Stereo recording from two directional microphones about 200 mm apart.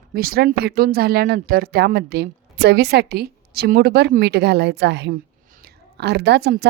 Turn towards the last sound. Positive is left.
turn(degrees=-55)  # may be behind; listen again after turning